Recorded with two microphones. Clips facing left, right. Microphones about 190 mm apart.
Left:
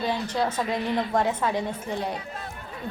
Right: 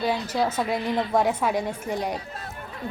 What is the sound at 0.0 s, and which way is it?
A woman's voice, 10° right (ahead or behind).